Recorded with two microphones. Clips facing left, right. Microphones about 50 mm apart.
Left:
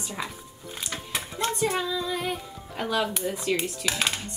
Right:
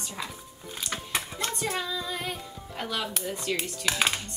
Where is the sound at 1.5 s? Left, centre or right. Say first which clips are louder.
Left 5 dB; centre.